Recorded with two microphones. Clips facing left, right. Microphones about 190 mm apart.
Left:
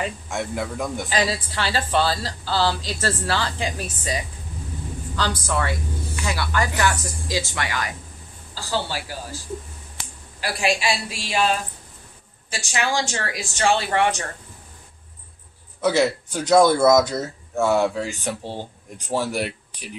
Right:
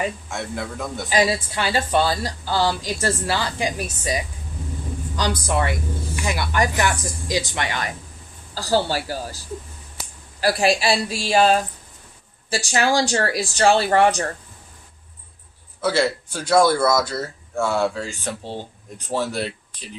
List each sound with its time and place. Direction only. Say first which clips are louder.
0.3 s speech: left 2 dB; 15° left (ahead or behind)
1.1 s speech: right 6 dB; 15° right (ahead or behind)
5.5 s speech: right 2 dB; 20° right (ahead or behind)
8.5 s speech: right 6 dB; 40° right (ahead or behind)
10.4 s speech: right 4 dB; 40° right (ahead or behind)
15.8 s speech: left 1 dB; 15° left (ahead or behind)